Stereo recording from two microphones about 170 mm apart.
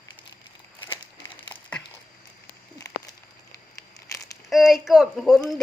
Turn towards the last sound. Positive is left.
turn(degrees=0)  # may be behind; listen again after turning